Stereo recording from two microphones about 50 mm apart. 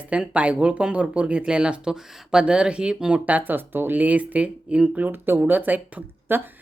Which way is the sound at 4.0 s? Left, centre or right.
Right.